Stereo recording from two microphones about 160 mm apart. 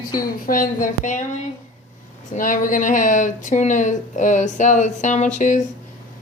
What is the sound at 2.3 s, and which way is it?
Speech, 55° left (ahead or behind).